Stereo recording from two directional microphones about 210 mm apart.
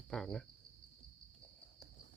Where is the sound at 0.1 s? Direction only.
Centre (ahead or behind).